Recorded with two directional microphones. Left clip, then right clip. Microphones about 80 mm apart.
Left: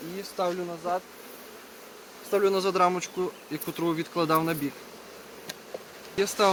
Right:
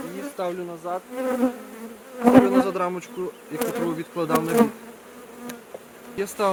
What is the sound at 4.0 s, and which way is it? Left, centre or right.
Bee, left.